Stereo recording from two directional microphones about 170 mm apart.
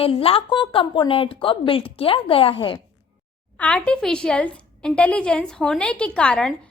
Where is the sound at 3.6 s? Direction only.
5° left (ahead or behind).